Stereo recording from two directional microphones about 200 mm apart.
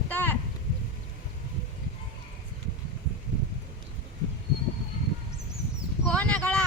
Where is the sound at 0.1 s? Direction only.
10° left (ahead or behind).